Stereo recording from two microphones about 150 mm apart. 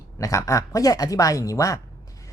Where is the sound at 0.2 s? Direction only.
20° left (ahead or behind).